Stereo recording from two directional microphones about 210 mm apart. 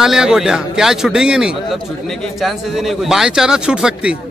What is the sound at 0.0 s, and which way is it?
Speech, centre (ahead or behind).